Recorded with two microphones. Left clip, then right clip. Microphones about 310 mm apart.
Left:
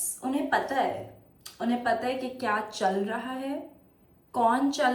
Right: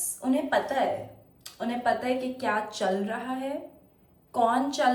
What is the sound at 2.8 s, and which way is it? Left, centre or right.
A woman's voice, centre.